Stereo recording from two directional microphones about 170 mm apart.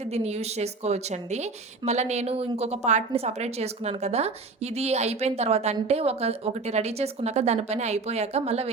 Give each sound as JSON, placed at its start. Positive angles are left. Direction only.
{"t": 0.1, "sound": "speech", "side_deg": -40}